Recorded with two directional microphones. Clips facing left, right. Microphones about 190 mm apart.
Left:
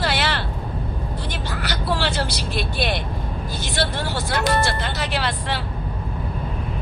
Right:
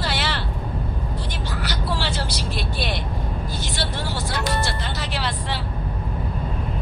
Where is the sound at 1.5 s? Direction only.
60° left (ahead or behind).